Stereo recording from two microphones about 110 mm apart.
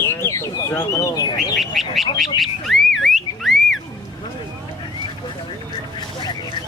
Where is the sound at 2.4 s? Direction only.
Centre (ahead or behind).